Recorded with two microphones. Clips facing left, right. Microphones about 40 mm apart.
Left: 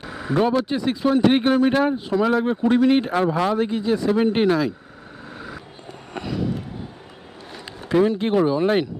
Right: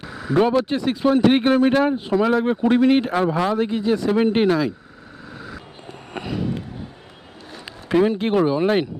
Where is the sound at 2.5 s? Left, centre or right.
Centre.